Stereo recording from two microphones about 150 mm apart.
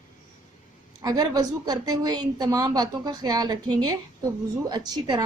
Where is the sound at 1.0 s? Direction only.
25° right (ahead or behind).